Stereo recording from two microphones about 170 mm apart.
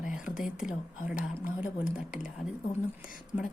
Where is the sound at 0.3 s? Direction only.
5° right (ahead or behind).